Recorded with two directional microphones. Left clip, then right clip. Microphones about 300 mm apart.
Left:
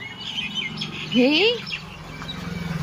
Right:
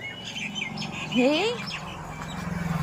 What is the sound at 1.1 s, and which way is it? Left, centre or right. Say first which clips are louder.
Speech: left 5 dB; centre.